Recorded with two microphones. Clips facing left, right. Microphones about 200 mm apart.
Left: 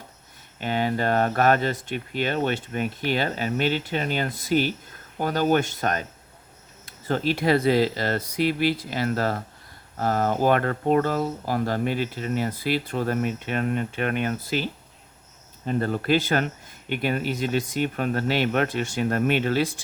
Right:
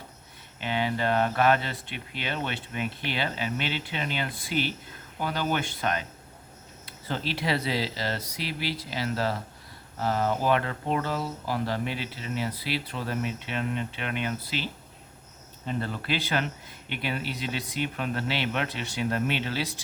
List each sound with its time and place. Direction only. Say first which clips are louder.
0.6 s speech: left 3 dB; 45° left (ahead or behind)